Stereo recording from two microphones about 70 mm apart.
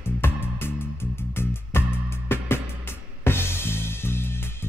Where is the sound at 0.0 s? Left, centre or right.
Left.